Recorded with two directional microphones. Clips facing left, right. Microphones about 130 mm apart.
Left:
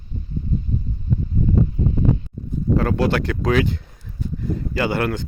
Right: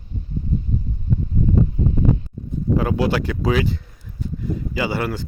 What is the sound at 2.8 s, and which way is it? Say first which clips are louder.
Speech: even; 10° right (ahead or behind).